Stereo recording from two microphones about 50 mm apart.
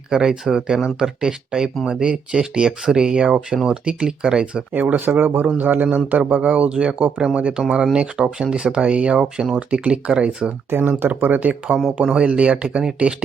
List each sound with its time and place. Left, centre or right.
0.1 s speech: centre
4.7 s speech: right
10.7 s speech: right
11.2 s speech: right
11.7 s speech: centre
12.1 s speech: right